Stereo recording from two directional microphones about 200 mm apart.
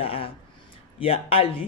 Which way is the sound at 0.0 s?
30° left (ahead or behind).